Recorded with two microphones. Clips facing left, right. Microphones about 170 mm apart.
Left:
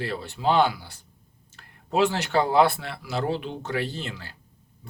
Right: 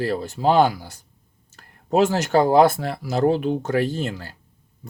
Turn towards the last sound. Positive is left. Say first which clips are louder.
# right 7 dB
turn(degrees=-45)  # may be behind; listen again after turning